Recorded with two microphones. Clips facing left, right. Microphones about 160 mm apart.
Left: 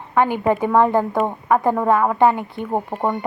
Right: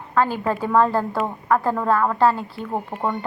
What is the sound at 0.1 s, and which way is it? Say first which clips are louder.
Speech: left 3 dB; 20° left (ahead or behind).